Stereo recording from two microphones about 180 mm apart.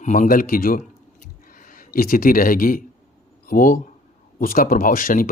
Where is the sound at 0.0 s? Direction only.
45° left (ahead or behind).